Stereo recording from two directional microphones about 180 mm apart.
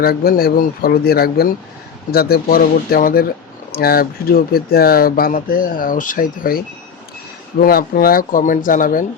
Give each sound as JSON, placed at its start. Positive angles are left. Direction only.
{"t": 0.0, "sound": "speech", "side_deg": 55}
{"t": 7.6, "sound": "speech", "side_deg": 55}